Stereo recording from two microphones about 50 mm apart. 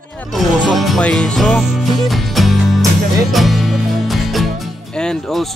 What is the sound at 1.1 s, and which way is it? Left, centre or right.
Speech, centre.